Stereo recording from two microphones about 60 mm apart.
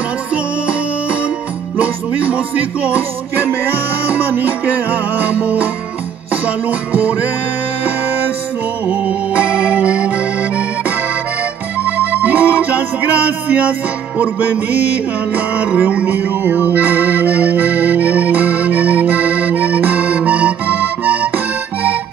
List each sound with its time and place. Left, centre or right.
1.8 s music: right
8.8 s accordion: right
11.8 s music: right